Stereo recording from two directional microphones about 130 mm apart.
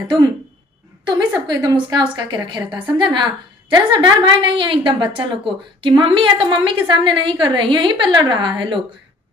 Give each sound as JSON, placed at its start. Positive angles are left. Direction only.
{"t": 1.5, "sound": "a woman's voice", "side_deg": -30}